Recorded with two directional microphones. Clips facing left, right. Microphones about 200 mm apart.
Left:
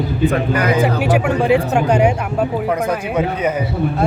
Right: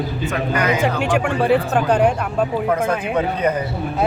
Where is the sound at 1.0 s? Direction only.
5° left (ahead or behind).